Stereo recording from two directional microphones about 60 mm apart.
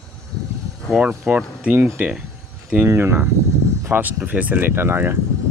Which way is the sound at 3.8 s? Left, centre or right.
Right.